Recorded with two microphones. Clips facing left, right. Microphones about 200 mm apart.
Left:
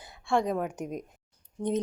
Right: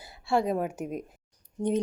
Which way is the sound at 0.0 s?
5° right (ahead or behind).